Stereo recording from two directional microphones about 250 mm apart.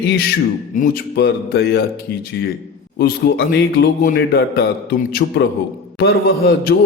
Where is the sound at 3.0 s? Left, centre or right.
Left.